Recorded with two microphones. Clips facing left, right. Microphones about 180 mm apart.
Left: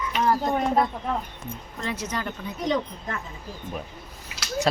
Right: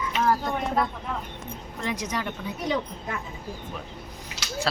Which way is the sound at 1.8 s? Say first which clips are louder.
Even; 15° right (ahead or behind).